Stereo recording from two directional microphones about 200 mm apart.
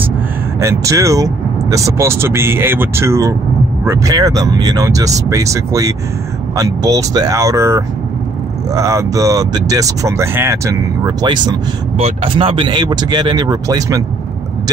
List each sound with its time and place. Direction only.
0.6 s speech: 15° right (ahead or behind)